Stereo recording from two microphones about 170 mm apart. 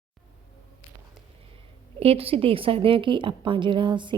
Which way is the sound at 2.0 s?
35° right (ahead or behind).